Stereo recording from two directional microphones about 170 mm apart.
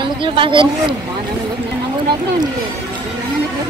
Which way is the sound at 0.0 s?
30° right (ahead or behind).